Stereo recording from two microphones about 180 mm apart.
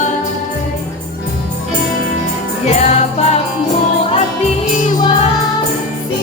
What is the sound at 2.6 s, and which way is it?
Music, 40° left (ahead or behind).